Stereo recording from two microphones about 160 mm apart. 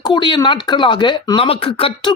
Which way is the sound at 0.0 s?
30° left (ahead or behind).